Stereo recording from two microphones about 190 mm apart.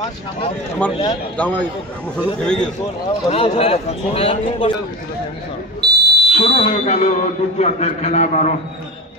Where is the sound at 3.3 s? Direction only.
30° left (ahead or behind).